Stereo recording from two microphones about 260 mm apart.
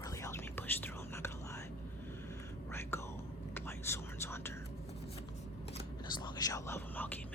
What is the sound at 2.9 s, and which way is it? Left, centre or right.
Whispering, centre.